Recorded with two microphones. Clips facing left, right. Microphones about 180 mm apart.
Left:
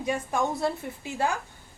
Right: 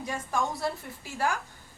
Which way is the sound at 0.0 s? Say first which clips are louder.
Left 4 dB; 20° left (ahead or behind).